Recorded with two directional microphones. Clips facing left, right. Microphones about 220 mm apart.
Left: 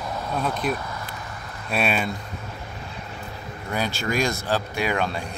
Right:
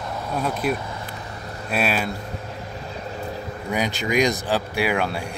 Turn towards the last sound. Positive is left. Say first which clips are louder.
# right 2 dB
turn(degrees=-10)  # may be behind; listen again after turning